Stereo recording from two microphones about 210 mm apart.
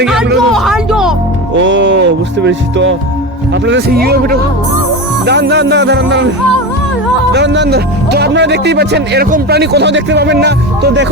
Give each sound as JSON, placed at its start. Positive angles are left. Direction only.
{"t": 0.0, "sound": "music", "side_deg": 0}
{"t": 1.5, "sound": "music", "side_deg": -60}
{"t": 3.7, "sound": "speech", "side_deg": -50}
{"t": 7.3, "sound": "speech", "side_deg": -55}